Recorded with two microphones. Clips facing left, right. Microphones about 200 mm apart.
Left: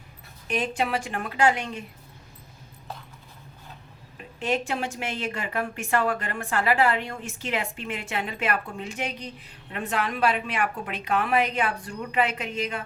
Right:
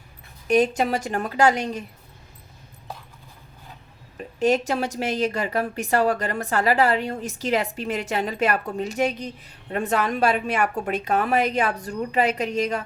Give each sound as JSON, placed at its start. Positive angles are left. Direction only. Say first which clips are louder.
{"t": 0.4, "sound": "a woman's voice", "louder": "right 8 dB", "side_deg": -40}
{"t": 4.4, "sound": "a woman's voice", "louder": "right 6 dB", "side_deg": -40}